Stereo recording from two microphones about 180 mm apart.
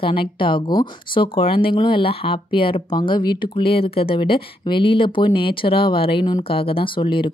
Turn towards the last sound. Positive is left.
turn(degrees=30)  # may be behind; listen again after turning